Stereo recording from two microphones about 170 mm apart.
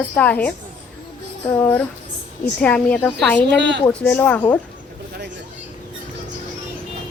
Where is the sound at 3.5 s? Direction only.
90° right.